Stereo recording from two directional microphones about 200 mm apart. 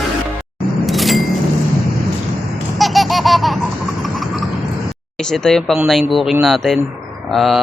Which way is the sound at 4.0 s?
Centre (ahead or behind).